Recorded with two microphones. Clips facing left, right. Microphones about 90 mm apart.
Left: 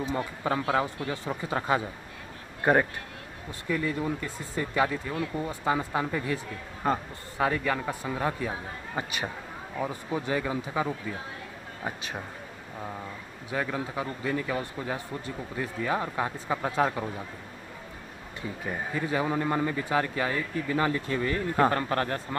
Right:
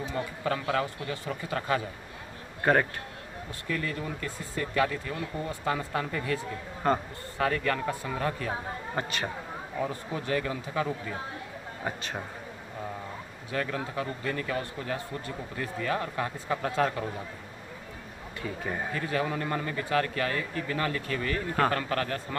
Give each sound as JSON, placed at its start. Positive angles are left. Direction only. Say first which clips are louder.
{"t": 0.0, "sound": "a man's voice", "louder": "left 2 dB", "side_deg": 25}
{"t": 13.5, "sound": "a man's voice", "louder": "left 1 dB", "side_deg": 15}
{"t": 18.7, "sound": "a man's voice", "louder": "left 2 dB", "side_deg": 10}